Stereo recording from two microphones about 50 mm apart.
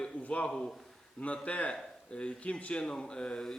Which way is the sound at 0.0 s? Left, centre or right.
Left.